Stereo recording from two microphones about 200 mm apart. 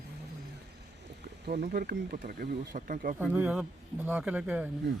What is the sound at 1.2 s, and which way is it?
Speech, 55° right (ahead or behind).